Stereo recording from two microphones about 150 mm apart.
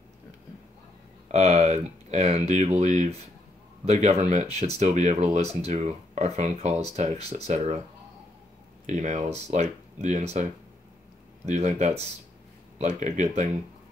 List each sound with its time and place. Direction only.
1.3 s speech: 45° right (ahead or behind)
8.8 s speech: 50° right (ahead or behind)